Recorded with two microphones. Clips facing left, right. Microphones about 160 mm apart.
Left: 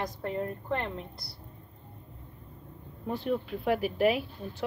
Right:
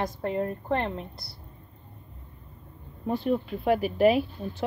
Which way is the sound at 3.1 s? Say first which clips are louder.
Right 4 dB; 20° right (ahead or behind).